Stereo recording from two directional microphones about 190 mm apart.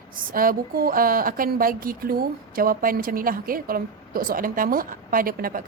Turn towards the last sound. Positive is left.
turn(degrees=-50)  # may be behind; listen again after turning